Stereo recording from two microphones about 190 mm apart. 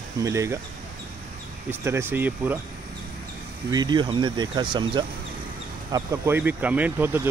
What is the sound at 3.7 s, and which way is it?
Speech, 25° right (ahead or behind).